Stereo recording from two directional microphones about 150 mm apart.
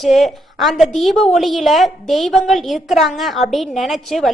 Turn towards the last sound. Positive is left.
turn(degrees=0)  # may be behind; listen again after turning